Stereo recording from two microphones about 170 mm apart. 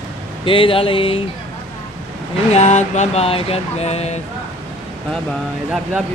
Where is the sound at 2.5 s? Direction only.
45° left (ahead or behind).